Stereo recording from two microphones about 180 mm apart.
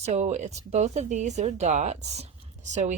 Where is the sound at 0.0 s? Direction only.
40° right (ahead or behind).